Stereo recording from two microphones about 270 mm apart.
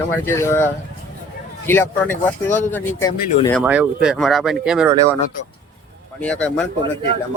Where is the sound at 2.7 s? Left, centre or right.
Centre.